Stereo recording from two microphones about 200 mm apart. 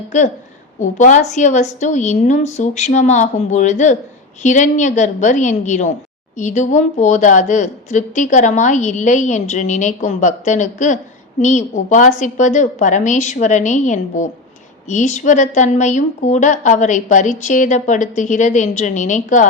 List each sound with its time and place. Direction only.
0.1 s a woman's voice: 35° left (ahead or behind)